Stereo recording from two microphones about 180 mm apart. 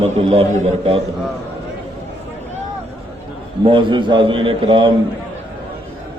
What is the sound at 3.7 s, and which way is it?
A man's voice, 25° right (ahead or behind).